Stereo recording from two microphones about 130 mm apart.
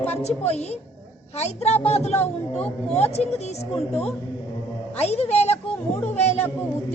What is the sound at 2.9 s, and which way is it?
Speech, 55° left (ahead or behind).